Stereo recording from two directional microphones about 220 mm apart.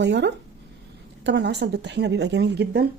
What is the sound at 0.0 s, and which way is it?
A woman's voice, 50° right (ahead or behind).